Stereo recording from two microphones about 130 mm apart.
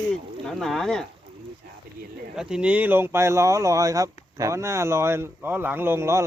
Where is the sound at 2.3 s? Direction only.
5° right (ahead or behind).